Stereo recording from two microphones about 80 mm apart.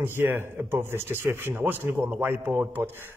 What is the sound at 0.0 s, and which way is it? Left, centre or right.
Speech, right.